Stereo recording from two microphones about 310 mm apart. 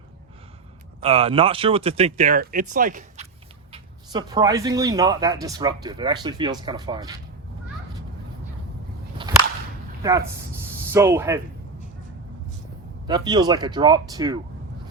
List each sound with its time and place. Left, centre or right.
1.0 s speech: centre
3.7 s speech: centre
10.0 s speech: centre
13.1 s speech: centre